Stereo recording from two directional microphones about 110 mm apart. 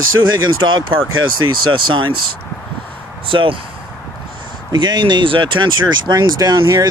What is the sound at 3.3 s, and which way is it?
Speech, 50° right (ahead or behind).